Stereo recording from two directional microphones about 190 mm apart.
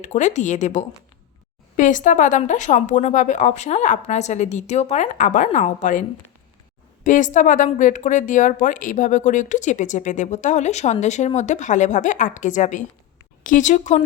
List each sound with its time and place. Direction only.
0.0 s speech: 40° left (ahead or behind)